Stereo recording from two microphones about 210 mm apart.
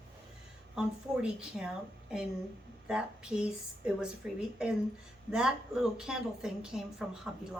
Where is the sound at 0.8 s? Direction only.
5° right (ahead or behind).